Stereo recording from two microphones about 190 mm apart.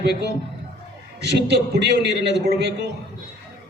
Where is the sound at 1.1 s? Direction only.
60° right (ahead or behind).